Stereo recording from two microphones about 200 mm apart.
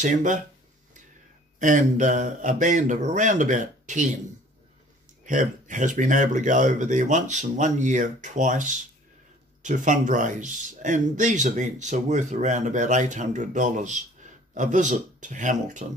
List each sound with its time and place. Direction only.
0.0 s speech: 40° right (ahead or behind)
1.6 s speech: 40° right (ahead or behind)
5.2 s speech: 40° right (ahead or behind)